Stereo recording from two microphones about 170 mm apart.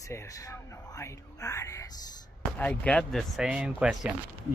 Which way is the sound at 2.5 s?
10° left (ahead or behind).